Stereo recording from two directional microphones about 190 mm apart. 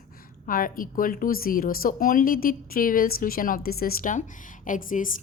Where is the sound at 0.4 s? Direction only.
45° left (ahead or behind).